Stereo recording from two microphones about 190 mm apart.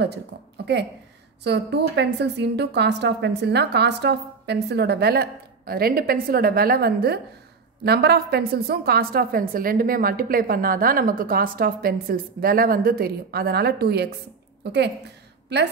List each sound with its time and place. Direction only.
1.4 s a woman's voice: 60° right (ahead or behind)